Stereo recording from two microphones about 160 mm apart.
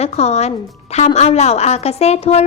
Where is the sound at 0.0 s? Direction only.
40° left (ahead or behind).